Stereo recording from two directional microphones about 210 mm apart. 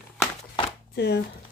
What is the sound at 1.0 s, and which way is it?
Speech, 55° left (ahead or behind).